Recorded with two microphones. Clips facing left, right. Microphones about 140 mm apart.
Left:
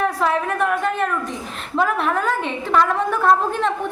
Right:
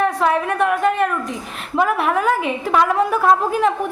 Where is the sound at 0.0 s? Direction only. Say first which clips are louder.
Right 2 dB; centre (ahead or behind).